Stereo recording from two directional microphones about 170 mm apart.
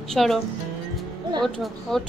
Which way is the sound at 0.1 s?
Centre (ahead or behind).